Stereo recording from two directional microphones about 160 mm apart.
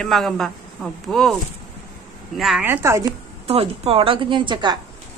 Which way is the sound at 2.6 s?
15° right (ahead or behind).